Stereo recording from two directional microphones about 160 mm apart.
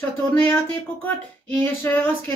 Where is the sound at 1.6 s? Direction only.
15° left (ahead or behind).